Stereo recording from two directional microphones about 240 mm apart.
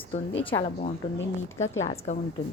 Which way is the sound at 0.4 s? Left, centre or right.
Left.